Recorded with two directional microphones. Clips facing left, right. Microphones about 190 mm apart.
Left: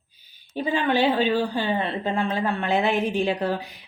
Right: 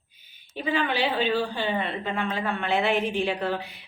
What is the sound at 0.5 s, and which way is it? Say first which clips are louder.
A woman's voice: left 4 dB; 45° left (ahead or behind).